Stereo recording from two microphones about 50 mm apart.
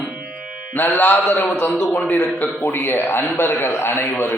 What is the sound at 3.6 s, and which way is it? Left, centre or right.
Speech, left.